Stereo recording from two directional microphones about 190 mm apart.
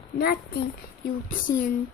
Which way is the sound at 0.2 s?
55° left (ahead or behind).